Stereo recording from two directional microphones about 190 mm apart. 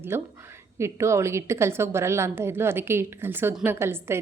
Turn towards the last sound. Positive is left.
turn(degrees=-10)  # may be behind; listen again after turning